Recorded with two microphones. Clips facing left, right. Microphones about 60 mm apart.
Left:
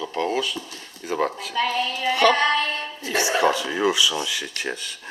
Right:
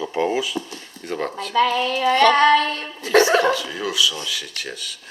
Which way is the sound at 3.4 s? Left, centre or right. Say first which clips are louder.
Left 2 dB; centre.